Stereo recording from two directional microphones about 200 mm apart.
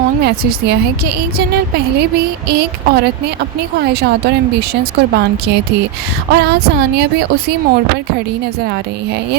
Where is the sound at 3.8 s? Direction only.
55° right (ahead or behind).